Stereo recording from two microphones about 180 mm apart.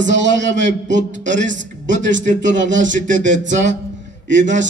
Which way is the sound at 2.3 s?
45° right (ahead or behind).